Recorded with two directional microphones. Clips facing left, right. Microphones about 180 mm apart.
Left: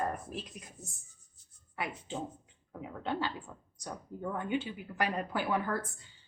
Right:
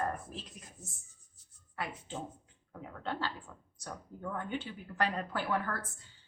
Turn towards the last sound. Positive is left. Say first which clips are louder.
# left 2 dB
turn(degrees=15)  # may be behind; listen again after turning